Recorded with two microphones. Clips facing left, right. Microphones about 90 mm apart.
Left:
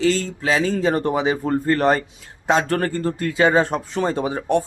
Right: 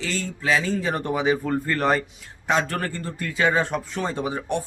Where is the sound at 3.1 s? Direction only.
30° left (ahead or behind).